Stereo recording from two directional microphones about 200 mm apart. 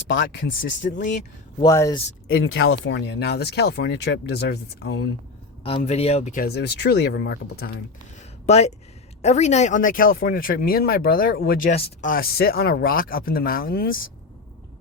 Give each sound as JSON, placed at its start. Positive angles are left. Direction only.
{"t": 0.1, "sound": "speech", "side_deg": 65}
{"t": 1.6, "sound": "speech", "side_deg": 15}
{"t": 2.4, "sound": "speech", "side_deg": 70}
{"t": 5.6, "sound": "speech", "side_deg": 30}
{"t": 8.4, "sound": "speech", "side_deg": 35}